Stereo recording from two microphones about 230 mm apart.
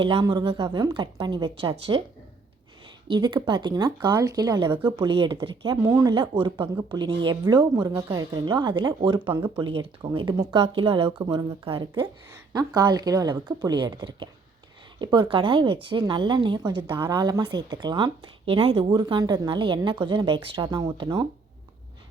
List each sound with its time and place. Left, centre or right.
0.2 s speech: centre
3.1 s speech: centre